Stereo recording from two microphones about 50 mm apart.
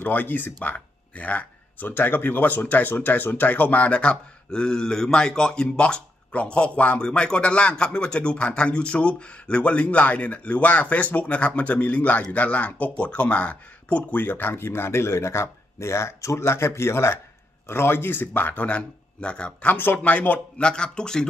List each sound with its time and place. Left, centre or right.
0.0 s speech: left
14.2 s speech: left
20.5 s speech: centre